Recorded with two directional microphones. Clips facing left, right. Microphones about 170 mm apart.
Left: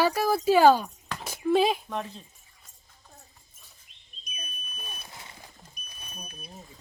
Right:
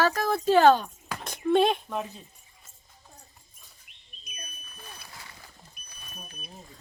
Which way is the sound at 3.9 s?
60° right (ahead or behind).